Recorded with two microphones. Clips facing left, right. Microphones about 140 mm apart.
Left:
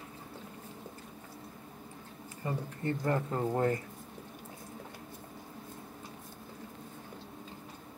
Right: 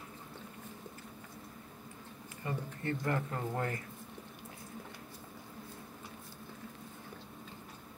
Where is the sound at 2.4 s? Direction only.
30° left (ahead or behind).